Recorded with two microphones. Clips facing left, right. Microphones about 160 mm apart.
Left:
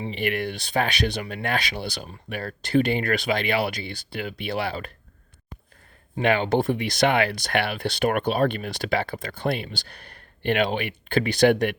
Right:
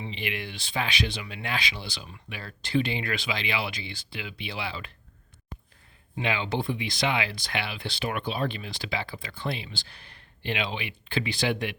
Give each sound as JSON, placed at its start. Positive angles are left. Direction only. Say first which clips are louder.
{"t": 0.1, "sound": "speech", "louder": "left 8 dB", "side_deg": 55}
{"t": 6.2, "sound": "speech", "louder": "left 8 dB", "side_deg": 55}